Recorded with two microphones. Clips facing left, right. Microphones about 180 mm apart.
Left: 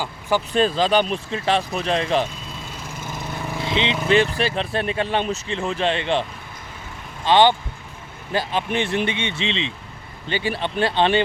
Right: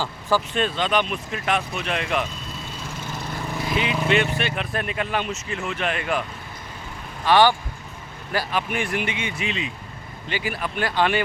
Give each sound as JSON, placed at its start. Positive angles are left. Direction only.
{"t": 0.0, "sound": "vehicle", "side_deg": 15}
{"t": 0.5, "sound": "speech", "side_deg": 35}
{"t": 3.6, "sound": "speech", "side_deg": 25}
{"t": 7.3, "sound": "speech", "side_deg": 20}